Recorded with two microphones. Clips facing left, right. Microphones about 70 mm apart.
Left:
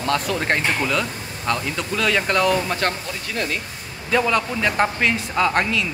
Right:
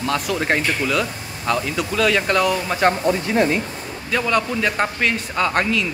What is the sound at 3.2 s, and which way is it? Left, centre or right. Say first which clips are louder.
Speech: right 6 dB; right.